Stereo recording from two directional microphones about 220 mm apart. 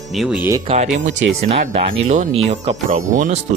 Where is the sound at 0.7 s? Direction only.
35° right (ahead or behind).